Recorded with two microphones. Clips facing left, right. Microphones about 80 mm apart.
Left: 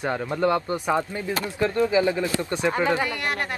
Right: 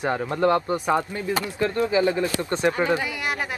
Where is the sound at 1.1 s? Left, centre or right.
Left.